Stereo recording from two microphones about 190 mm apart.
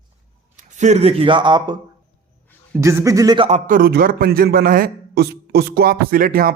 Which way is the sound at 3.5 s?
40° right (ahead or behind).